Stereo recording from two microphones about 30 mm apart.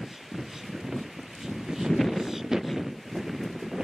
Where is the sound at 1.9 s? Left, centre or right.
Centre.